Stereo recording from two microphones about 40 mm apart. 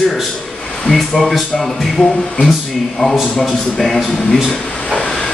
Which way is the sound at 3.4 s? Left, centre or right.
Centre.